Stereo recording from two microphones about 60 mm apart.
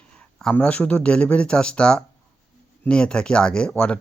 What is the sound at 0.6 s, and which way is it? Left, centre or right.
Speech, left.